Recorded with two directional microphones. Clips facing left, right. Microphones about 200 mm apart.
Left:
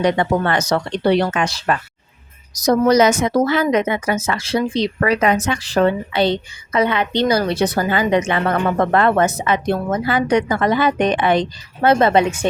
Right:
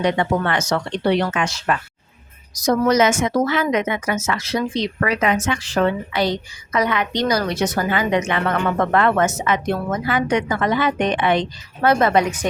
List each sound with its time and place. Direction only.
0.0 s a woman's voice: 40° left (ahead or behind)
11.8 s a woman's voice: 25° left (ahead or behind)